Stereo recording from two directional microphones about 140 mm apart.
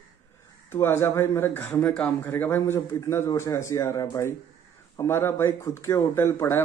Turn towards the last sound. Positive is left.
turn(degrees=15)  # may be behind; listen again after turning